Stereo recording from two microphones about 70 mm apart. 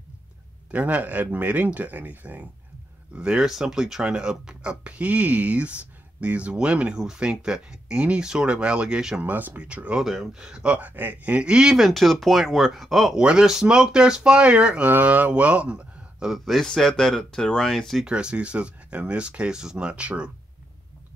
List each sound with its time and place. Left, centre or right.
0.7 s speech: right
3.2 s speech: centre
9.2 s speech: right
10.0 s speech: centre
14.9 s speech: right
16.4 s speech: centre
18.0 s speech: centre